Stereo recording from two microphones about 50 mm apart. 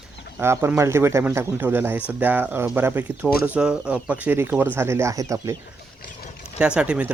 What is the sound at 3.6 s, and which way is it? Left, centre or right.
Speech, centre.